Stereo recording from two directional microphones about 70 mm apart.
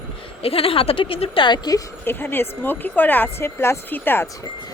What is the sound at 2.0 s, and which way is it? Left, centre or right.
A woman's voice, left.